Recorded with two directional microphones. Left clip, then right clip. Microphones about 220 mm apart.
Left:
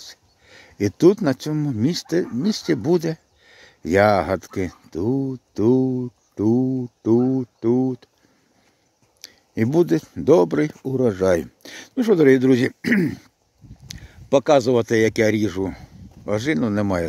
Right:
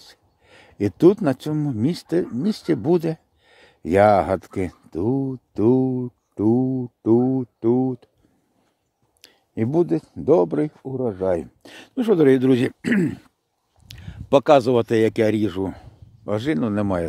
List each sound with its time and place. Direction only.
0.1 s speech: centre (ahead or behind)
9.2 s speech: centre (ahead or behind)
10.9 s speech: 25° left (ahead or behind)
11.3 s speech: 5° left (ahead or behind)